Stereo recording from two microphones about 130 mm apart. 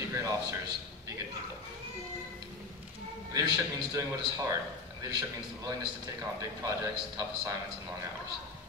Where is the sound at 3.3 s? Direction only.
25° right (ahead or behind).